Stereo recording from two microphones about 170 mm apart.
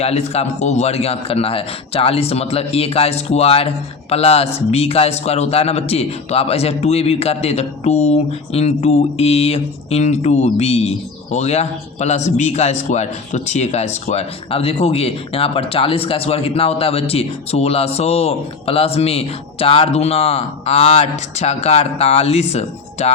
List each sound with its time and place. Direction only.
0.0 s a man's voice: 35° left (ahead or behind)